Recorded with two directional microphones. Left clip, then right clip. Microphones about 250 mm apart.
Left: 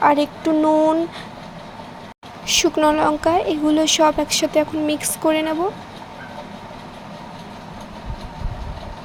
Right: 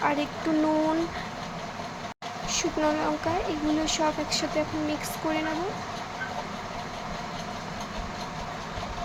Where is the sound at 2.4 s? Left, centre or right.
Left.